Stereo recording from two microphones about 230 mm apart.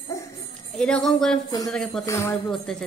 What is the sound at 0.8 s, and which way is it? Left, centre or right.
Speech, centre.